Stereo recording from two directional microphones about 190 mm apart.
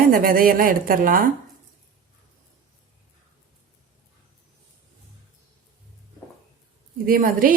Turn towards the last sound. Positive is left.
turn(degrees=-45)  # may be behind; listen again after turning